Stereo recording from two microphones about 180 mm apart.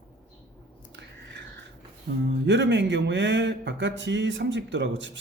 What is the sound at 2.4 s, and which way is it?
Speech, 80° right.